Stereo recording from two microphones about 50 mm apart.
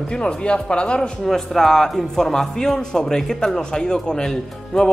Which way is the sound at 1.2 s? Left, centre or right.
Centre.